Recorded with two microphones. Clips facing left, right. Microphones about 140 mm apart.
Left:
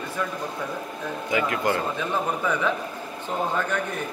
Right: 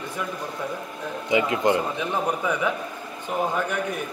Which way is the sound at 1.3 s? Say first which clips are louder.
Right 3 dB; 20° right (ahead or behind).